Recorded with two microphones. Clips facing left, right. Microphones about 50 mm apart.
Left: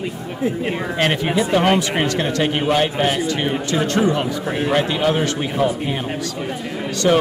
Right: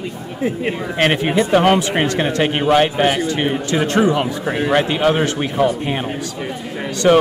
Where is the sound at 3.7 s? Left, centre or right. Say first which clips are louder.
Right 2 dB; right.